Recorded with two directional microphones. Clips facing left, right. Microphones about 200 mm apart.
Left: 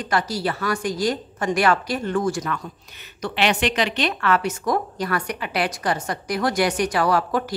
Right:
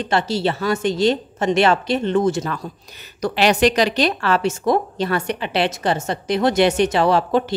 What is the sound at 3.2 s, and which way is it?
A woman's voice, 40° right (ahead or behind).